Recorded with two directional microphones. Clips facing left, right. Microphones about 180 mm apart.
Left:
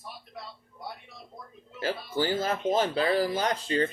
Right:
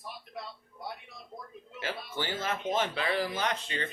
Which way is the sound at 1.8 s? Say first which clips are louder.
Left 7 dB; 40° left (ahead or behind).